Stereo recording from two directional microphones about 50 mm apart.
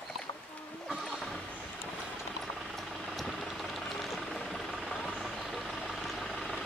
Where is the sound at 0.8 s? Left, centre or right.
Centre.